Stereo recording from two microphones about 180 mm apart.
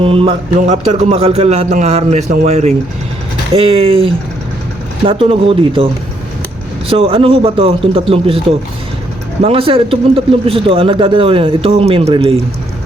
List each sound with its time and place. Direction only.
0.0 s a man's voice: 30° right (ahead or behind)
9.4 s a man's voice: 30° right (ahead or behind)